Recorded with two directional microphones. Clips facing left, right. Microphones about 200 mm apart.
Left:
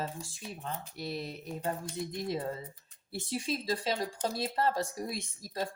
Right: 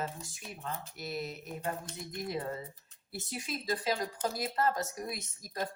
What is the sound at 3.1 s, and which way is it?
Speech, 30° left (ahead or behind).